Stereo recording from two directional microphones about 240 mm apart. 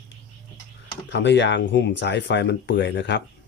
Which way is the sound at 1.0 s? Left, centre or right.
Left.